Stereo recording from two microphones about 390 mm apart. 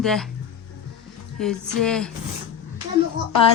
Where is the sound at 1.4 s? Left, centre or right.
Centre.